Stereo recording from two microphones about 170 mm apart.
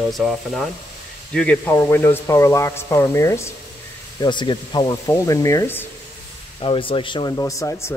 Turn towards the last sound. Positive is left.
turn(degrees=15)  # may be behind; listen again after turning